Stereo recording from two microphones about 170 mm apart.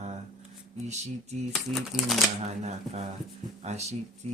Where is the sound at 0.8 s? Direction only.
40° right (ahead or behind).